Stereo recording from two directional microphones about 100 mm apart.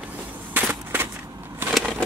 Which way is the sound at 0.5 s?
20° right (ahead or behind).